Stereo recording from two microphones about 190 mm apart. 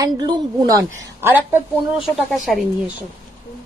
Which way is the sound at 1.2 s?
10° right (ahead or behind).